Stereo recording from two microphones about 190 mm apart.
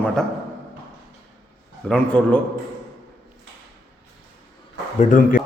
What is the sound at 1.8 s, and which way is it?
Speech, 5° left (ahead or behind).